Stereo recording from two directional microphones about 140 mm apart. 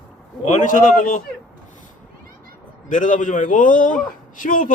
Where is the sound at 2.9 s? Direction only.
65° left (ahead or behind).